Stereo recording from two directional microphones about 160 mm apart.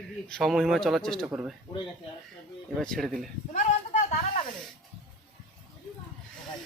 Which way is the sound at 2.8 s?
5° left (ahead or behind).